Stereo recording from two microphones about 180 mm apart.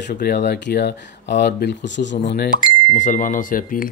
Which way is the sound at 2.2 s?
60° left (ahead or behind).